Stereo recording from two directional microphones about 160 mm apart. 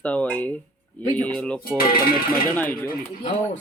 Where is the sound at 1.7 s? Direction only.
65° left (ahead or behind).